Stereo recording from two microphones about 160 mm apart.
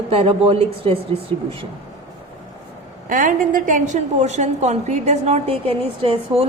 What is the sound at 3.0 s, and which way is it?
A woman's voice, 55° right (ahead or behind).